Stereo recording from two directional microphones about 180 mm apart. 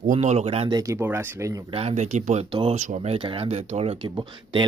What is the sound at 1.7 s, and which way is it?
Speech, 35° right (ahead or behind).